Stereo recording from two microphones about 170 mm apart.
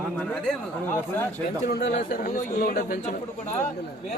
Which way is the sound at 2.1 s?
55° left (ahead or behind).